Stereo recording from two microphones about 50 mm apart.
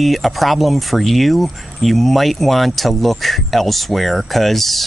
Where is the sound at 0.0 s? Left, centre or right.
Centre.